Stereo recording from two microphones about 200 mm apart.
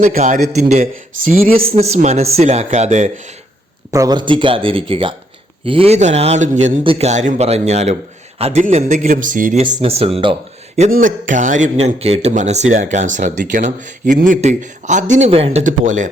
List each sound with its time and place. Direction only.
0.0 s speech: 40° right (ahead or behind)
3.9 s speech: 20° right (ahead or behind); by 9.6 s 40° right (ahead or behind)
9.7 s speech: 30° right (ahead or behind)
11.0 s speech: 40° right (ahead or behind)